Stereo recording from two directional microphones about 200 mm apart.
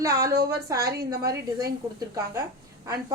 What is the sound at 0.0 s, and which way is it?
Speech, 15° right (ahead or behind).